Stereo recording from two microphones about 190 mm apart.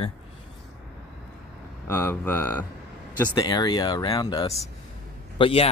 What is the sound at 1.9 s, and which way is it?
Speech, 15° left (ahead or behind).